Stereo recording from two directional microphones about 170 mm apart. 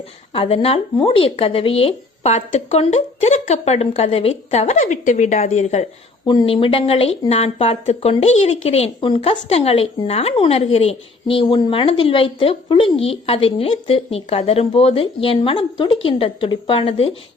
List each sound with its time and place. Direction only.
0.3 s speech: 35° left (ahead or behind)
6.2 s speech: 30° left (ahead or behind)